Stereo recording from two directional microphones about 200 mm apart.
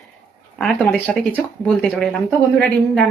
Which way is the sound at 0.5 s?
5° left (ahead or behind).